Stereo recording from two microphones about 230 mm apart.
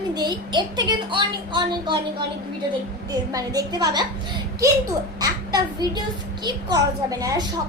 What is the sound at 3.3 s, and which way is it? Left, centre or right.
Speech, centre.